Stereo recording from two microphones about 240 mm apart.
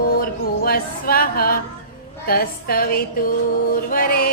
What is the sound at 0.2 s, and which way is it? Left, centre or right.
Music, left.